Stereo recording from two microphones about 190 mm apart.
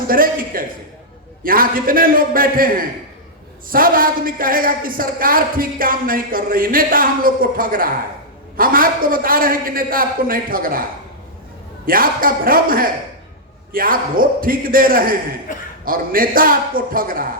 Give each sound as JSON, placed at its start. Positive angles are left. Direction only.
{"t": 0.1, "sound": "a woman's voice", "side_deg": -50}
{"t": 11.9, "sound": "a woman's voice", "side_deg": -50}